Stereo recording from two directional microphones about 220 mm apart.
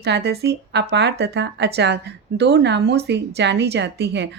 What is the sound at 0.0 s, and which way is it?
Speech, 50° right (ahead or behind).